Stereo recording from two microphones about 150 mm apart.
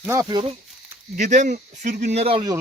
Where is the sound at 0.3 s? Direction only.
30° right (ahead or behind).